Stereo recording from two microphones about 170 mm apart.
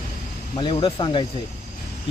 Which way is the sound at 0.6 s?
30° left (ahead or behind).